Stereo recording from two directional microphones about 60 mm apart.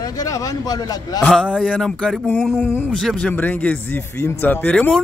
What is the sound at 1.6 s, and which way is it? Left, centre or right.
Speech, centre.